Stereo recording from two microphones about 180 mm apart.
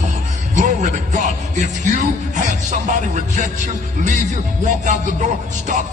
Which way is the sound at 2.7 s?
45° right (ahead or behind).